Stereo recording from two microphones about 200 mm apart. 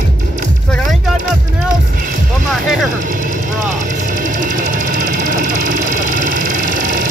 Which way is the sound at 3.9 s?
40° right (ahead or behind).